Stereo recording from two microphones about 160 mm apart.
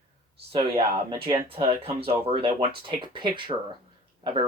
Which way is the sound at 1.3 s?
35° right (ahead or behind).